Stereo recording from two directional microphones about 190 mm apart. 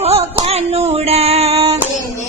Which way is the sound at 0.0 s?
30° right (ahead or behind).